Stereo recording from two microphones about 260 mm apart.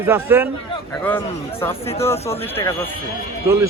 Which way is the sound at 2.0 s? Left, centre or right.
Centre.